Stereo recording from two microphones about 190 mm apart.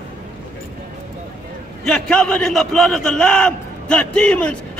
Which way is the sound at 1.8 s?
5° left (ahead or behind).